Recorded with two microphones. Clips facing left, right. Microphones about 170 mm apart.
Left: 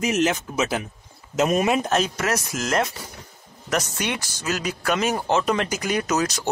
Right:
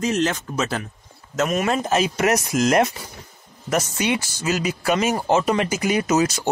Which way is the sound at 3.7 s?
10° right (ahead or behind).